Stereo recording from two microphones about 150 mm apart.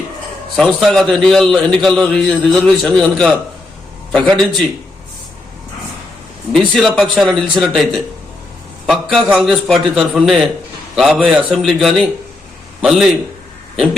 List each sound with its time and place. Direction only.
0.5 s a man's voice: centre (ahead or behind)
6.7 s a man's voice: centre (ahead or behind)